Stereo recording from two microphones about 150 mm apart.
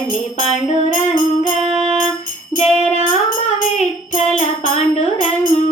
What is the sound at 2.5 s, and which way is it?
Music, 40° left (ahead or behind).